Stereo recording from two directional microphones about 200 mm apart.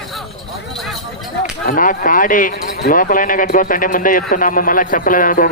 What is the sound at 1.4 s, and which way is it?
Speech, 40° left (ahead or behind).